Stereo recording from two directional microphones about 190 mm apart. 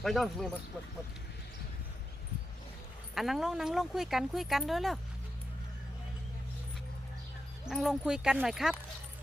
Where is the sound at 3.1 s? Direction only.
Centre (ahead or behind).